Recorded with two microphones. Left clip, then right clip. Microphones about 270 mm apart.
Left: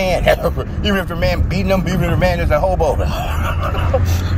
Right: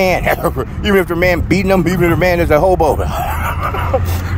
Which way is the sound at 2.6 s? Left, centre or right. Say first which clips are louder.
Right 4 dB; right.